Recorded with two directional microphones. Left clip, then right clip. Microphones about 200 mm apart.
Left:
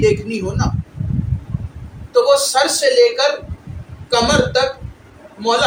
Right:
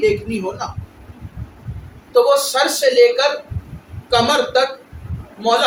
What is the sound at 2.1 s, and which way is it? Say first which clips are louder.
A man's voice: left 1 dB; 5° left (ahead or behind).